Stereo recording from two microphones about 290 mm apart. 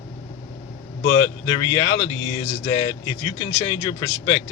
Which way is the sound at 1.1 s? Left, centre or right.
Centre.